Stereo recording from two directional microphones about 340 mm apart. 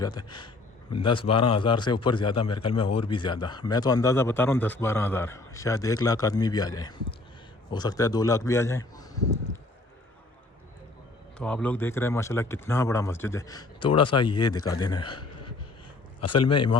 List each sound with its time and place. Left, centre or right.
0.0 s a sound: centre
1.0 s a man's voice: centre
11.3 s a man's voice: centre
15.0 s a man's voice: left